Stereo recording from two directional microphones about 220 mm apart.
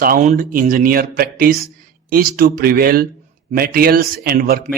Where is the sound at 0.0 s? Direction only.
40° right (ahead or behind).